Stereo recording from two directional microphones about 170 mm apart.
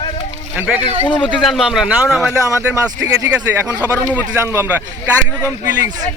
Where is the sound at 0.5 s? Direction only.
10° right (ahead or behind).